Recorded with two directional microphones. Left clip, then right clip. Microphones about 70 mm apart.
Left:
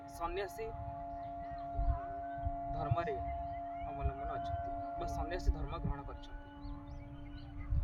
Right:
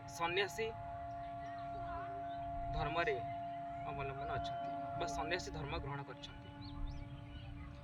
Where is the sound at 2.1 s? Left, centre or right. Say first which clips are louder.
Left 2 dB; centre.